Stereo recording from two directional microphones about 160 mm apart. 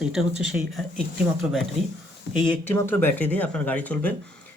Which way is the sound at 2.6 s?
15° left (ahead or behind).